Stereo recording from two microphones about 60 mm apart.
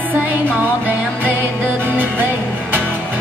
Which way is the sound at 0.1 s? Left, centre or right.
Right.